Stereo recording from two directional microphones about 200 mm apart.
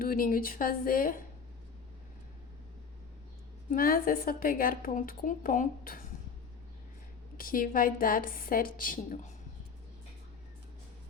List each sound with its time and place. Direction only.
0.0 s a woman's voice: 45° left (ahead or behind)
3.7 s a woman's voice: 45° left (ahead or behind)
7.3 s a woman's voice: 45° left (ahead or behind)